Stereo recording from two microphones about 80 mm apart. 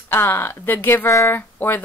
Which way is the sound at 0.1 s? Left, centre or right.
Left.